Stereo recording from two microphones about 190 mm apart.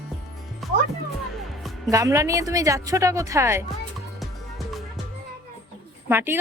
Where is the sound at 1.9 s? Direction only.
15° right (ahead or behind).